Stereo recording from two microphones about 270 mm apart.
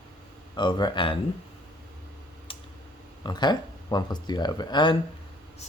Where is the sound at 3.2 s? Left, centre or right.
Centre.